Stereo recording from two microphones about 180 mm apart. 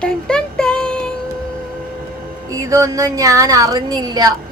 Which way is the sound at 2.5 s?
20° right (ahead or behind).